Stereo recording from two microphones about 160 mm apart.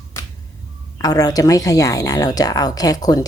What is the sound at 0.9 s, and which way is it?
Speech, 25° left (ahead or behind).